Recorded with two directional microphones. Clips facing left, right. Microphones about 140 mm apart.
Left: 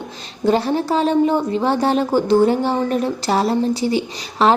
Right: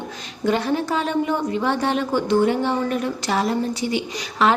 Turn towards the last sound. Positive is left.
turn(degrees=30)  # may be behind; listen again after turning